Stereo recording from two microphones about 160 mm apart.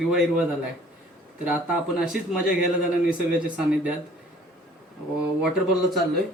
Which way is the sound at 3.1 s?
5° right (ahead or behind).